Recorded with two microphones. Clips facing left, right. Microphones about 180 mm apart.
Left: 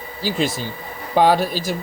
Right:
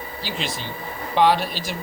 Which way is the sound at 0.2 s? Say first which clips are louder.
Left 9 dB; 45° left (ahead or behind).